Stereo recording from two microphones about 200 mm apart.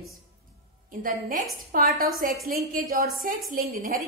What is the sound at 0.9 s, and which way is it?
A woman's voice, 45° right (ahead or behind).